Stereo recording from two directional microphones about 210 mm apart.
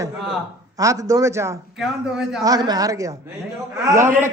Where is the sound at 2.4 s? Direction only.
15° right (ahead or behind).